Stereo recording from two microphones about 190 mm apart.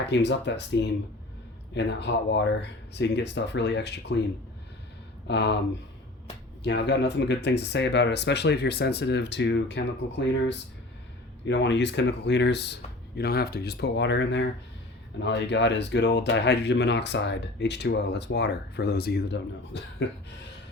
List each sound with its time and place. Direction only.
0.0 s speech: 65° left (ahead or behind)
5.3 s speech: 65° left (ahead or behind)
6.6 s speech: 60° left (ahead or behind)